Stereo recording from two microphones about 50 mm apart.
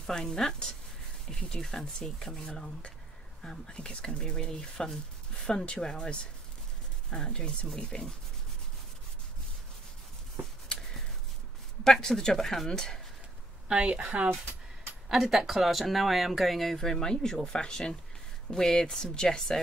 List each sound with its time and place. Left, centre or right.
0.0 s speech: centre
11.8 s speech: centre
13.7 s a woman's voice: right
15.0 s speech: centre